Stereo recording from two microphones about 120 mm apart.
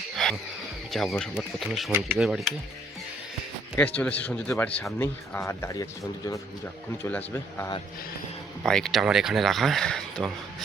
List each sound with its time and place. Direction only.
0.2 s a sound: centre (ahead or behind)
0.9 s speech: centre (ahead or behind)
3.8 s speech: 10° left (ahead or behind)
8.6 s speech: 5° left (ahead or behind)